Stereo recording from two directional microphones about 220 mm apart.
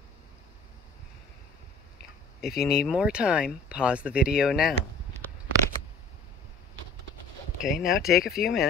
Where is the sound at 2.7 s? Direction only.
Centre (ahead or behind).